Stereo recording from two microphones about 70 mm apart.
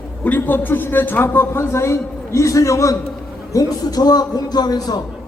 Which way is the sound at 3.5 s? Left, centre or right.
Left.